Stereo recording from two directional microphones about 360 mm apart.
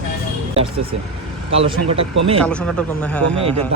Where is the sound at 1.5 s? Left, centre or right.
Centre.